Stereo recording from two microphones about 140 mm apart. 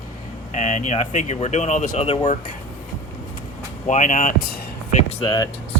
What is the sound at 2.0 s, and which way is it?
Speech, 50° left (ahead or behind).